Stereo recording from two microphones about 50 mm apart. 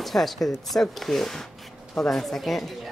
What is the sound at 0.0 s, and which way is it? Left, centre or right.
Speech, centre.